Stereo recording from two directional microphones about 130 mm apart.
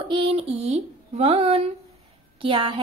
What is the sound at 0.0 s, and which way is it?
A woman's voice, 45° right (ahead or behind).